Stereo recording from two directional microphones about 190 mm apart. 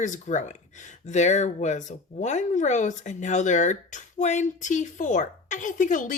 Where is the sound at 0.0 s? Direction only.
40° left (ahead or behind).